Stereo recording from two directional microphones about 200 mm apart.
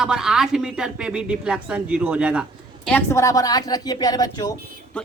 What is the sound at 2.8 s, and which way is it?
A woman's voice, 10° left (ahead or behind).